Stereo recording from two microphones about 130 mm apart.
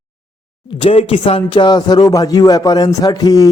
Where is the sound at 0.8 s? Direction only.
50° left (ahead or behind).